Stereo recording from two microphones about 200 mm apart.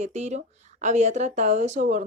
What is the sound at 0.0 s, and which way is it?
Speech, 35° right (ahead or behind).